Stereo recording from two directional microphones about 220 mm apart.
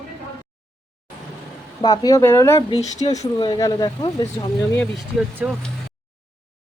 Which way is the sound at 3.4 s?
15° left (ahead or behind).